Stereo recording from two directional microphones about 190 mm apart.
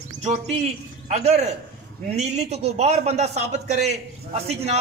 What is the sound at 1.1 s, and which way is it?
A man's voice, 35° right (ahead or behind).